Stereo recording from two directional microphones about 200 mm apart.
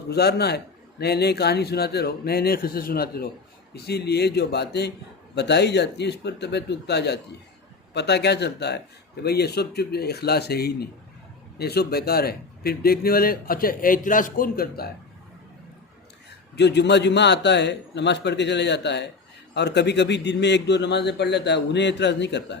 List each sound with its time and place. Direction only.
0.1 s a man's voice: 55° left (ahead or behind)
16.6 s speech: 60° left (ahead or behind)